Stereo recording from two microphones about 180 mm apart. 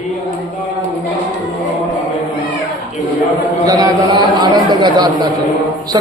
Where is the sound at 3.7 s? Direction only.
20° right (ahead or behind).